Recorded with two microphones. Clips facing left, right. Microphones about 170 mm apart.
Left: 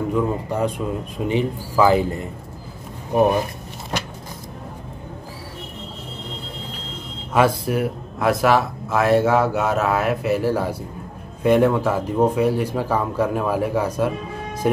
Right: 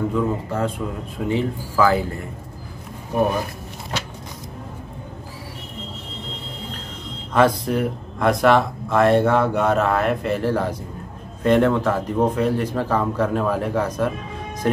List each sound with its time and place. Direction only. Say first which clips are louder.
0.1 s speech: left 1 dB; 15° left (ahead or behind)
7.3 s speech: right 1 dB; 10° left (ahead or behind)